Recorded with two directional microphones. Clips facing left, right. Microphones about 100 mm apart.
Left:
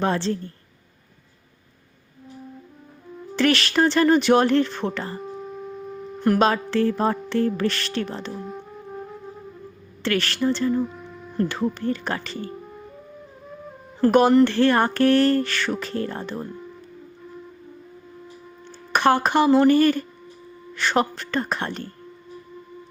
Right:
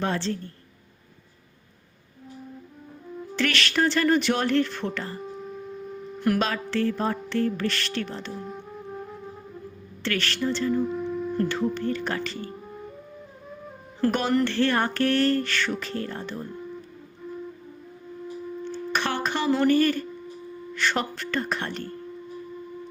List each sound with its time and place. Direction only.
0.0 s music: 35° left (ahead or behind)
3.3 s music: 40° left (ahead or behind)
5.2 s a sound: centre (ahead or behind)
6.2 s music: 30° left (ahead or behind)
8.4 s music: centre (ahead or behind)
10.0 s music: 40° left (ahead or behind)
10.8 s a sound: centre (ahead or behind)
11.5 s music: 40° left (ahead or behind)
14.1 s speech: 45° left (ahead or behind)
14.3 s music: 40° left (ahead or behind)
18.9 s speech: 45° left (ahead or behind)
20.7 s music: 40° left (ahead or behind)